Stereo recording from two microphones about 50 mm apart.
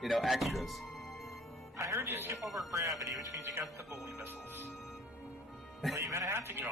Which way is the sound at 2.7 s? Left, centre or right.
Right.